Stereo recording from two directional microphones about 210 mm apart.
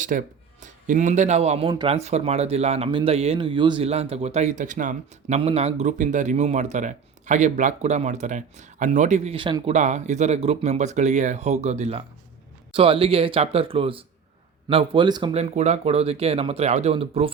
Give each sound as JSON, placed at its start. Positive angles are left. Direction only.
{"t": 0.0, "sound": "speech", "side_deg": -35}
{"t": 9.7, "sound": "speech", "side_deg": -35}